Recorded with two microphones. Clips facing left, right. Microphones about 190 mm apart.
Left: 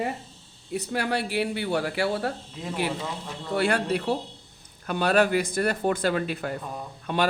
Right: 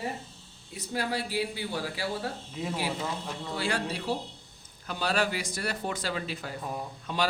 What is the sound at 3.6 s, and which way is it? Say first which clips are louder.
A man's voice: left 8 dB; 60° left (ahead or behind).